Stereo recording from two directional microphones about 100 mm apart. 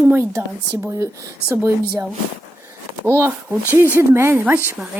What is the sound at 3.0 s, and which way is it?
Speech, 25° right (ahead or behind).